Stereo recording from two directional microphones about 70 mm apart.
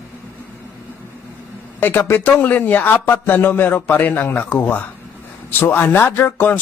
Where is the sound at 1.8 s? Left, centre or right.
Left.